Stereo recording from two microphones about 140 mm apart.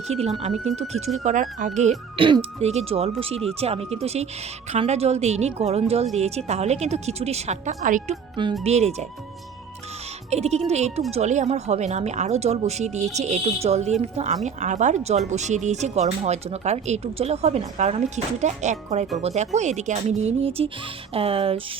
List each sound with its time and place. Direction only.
0.1 s speech: 50° right (ahead or behind)
1.2 s speech: 65° right (ahead or behind)
2.1 s speech: 40° right (ahead or behind)
10.2 s speech: 50° right (ahead or behind)